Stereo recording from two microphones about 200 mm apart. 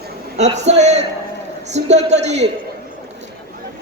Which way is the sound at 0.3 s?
35° right (ahead or behind).